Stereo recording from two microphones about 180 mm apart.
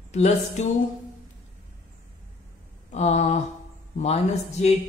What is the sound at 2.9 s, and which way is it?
Speech, 40° left (ahead or behind).